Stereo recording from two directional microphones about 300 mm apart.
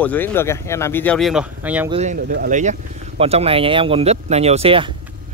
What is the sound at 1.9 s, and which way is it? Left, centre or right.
Speech, right.